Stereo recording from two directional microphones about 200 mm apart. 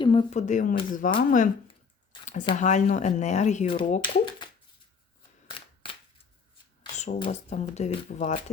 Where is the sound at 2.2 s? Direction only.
35° left (ahead or behind).